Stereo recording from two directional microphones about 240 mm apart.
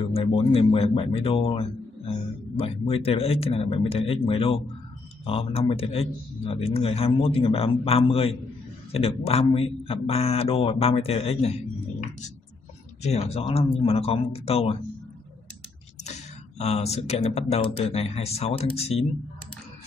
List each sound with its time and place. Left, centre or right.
0.2 s a man's voice: left
13.0 s a man's voice: left
16.0 s speech: left